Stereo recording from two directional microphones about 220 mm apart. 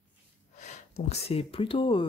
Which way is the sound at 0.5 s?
30° left (ahead or behind).